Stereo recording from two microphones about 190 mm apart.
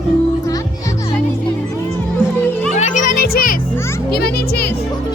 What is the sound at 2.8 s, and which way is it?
Music, 40° left (ahead or behind).